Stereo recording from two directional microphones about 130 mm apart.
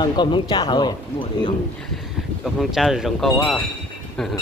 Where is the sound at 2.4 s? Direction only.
Centre (ahead or behind).